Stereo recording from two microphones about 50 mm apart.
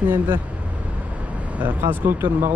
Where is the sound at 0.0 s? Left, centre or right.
Right.